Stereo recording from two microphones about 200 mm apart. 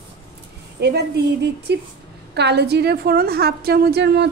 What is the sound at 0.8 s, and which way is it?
A woman's voice, 55° right (ahead or behind).